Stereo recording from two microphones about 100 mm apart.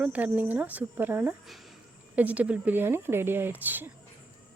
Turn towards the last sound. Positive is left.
turn(degrees=-20)  # may be behind; listen again after turning